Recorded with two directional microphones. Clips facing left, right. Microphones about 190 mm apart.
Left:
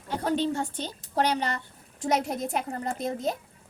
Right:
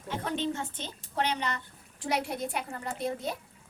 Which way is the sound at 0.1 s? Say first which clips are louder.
Left 5 dB; 35° left (ahead or behind).